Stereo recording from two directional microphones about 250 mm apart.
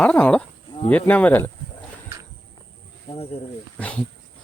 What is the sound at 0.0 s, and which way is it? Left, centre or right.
Speech, centre.